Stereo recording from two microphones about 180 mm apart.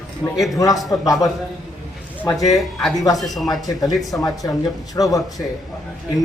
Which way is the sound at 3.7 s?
20° left (ahead or behind).